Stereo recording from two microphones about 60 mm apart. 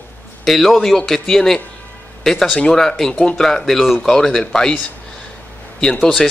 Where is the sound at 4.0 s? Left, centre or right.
Centre.